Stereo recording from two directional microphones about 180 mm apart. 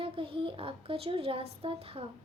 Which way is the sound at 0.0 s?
30° right (ahead or behind).